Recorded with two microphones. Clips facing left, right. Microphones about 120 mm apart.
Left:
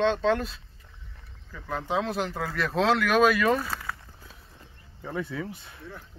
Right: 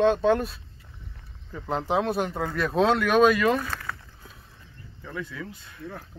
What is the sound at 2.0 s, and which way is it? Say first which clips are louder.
Speech: right 3 dB; centre (ahead or behind).